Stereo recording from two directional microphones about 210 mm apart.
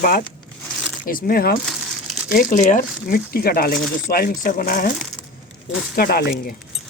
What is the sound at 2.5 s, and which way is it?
Speech, 35° left (ahead or behind).